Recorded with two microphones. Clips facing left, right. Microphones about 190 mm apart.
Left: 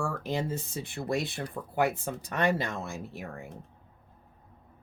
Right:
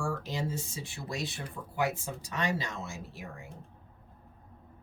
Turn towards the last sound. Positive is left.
turn(degrees=55)  # may be behind; listen again after turning